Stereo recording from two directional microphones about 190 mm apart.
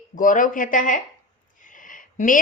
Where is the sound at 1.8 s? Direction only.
45° left (ahead or behind).